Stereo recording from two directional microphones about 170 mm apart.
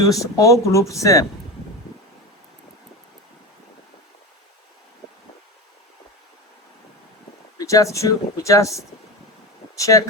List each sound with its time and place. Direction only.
0.0 s speech: 20° left (ahead or behind)
7.6 s speech: 20° left (ahead or behind)